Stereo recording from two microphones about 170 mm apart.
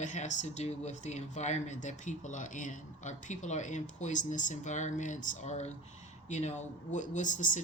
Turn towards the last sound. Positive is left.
turn(degrees=50)  # may be behind; listen again after turning